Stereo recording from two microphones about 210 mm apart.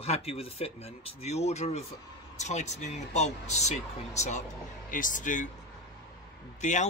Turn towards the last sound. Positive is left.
turn(degrees=35)  # may be behind; listen again after turning